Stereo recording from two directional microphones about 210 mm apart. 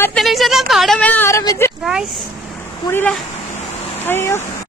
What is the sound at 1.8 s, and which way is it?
Speech, centre (ahead or behind).